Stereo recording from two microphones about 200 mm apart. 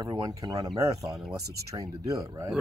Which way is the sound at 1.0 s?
Centre (ahead or behind).